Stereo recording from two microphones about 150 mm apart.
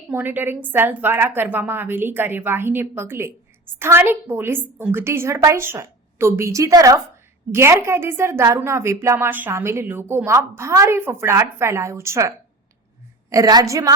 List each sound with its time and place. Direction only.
0.1 s a woman's voice: 10° right (ahead or behind)
13.3 s a woman's voice: 25° right (ahead or behind)